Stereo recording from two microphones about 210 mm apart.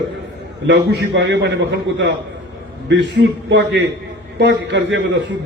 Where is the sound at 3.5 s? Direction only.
60° right (ahead or behind).